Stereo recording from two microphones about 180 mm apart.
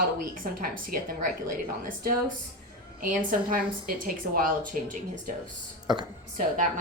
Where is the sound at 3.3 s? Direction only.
50° right (ahead or behind).